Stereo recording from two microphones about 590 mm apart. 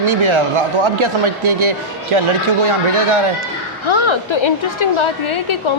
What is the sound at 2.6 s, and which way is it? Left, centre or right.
Speech, right.